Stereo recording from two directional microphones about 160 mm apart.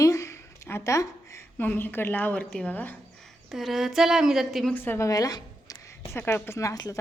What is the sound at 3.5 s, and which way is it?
Speech, centre (ahead or behind).